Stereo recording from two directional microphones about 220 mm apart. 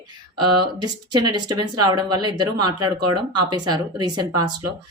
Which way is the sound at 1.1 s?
20° right (ahead or behind).